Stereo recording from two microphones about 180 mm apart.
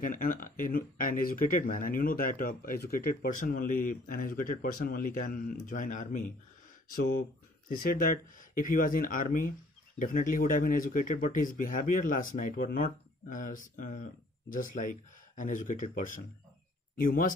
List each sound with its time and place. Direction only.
0.0 s speech: 50° left (ahead or behind)